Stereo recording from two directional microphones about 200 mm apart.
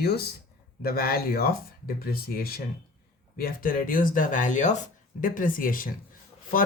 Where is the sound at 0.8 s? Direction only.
50° left (ahead or behind).